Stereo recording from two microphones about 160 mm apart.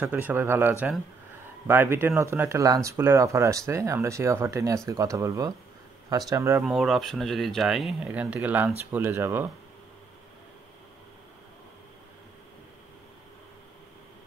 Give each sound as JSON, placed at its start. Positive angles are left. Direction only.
{"t": 0.0, "sound": "speech", "side_deg": -10}
{"t": 6.6, "sound": "speech", "side_deg": -5}